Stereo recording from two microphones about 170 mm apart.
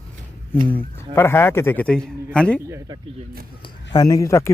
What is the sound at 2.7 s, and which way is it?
Speech, 25° right (ahead or behind).